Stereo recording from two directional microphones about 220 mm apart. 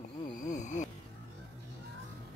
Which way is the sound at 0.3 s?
35° left (ahead or behind).